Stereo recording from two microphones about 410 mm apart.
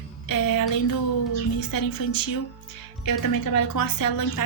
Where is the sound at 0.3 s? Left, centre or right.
Left.